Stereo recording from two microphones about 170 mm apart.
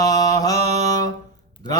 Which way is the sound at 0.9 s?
20° left (ahead or behind).